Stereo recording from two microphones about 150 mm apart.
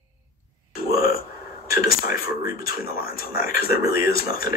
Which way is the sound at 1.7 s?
75° left (ahead or behind).